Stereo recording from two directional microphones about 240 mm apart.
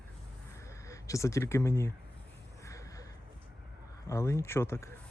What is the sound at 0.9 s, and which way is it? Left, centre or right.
Speech, centre.